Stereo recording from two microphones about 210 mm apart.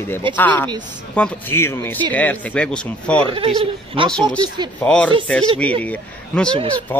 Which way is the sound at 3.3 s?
25° right (ahead or behind).